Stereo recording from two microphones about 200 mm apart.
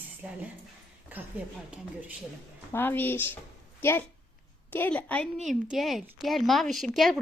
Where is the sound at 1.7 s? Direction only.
5° right (ahead or behind).